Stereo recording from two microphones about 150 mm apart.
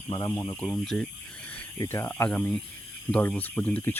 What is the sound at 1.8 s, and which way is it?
Speech, 15° left (ahead or behind).